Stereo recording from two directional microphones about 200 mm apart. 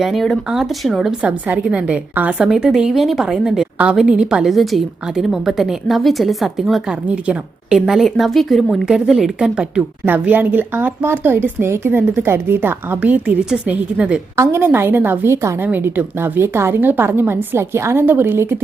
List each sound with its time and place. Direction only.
0.0 s a woman's voice: centre (ahead or behind)